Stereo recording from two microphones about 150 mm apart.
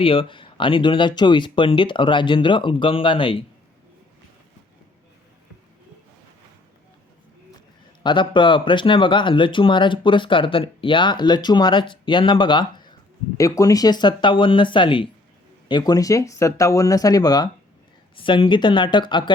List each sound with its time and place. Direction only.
0.0 s speech: 35° left (ahead or behind)
8.0 s speech: 35° left (ahead or behind)